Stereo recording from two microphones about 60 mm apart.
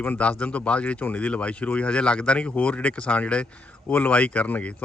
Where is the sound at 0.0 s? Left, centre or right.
Left.